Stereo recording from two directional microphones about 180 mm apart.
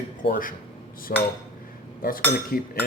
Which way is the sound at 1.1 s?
50° left (ahead or behind).